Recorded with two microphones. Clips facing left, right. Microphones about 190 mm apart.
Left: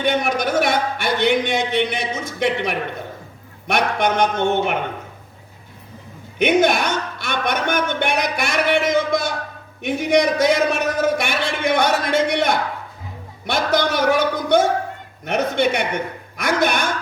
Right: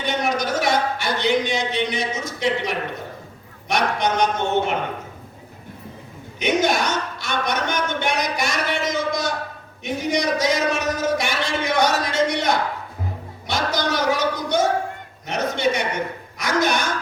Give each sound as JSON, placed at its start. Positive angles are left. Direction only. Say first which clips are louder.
{"t": 0.0, "sound": "a sound", "louder": "left 3 dB", "side_deg": 55}
{"t": 3.7, "sound": "speech", "louder": "left 2 dB", "side_deg": 55}
{"t": 6.4, "sound": "speech", "louder": "left 4 dB", "side_deg": 55}